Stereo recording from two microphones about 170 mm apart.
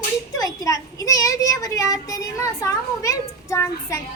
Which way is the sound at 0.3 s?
20° left (ahead or behind).